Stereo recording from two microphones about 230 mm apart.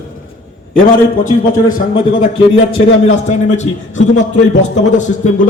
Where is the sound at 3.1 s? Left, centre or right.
Left.